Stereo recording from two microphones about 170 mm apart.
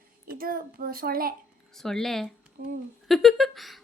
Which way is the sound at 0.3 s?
60° right (ahead or behind).